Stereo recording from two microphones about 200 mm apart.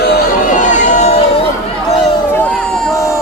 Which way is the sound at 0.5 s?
35° left (ahead or behind).